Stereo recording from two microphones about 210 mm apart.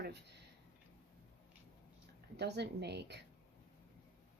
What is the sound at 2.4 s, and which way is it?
Speech, 55° right (ahead or behind).